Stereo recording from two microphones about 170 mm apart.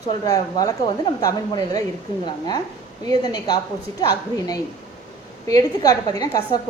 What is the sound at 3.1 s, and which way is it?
A woman's voice, 25° left (ahead or behind).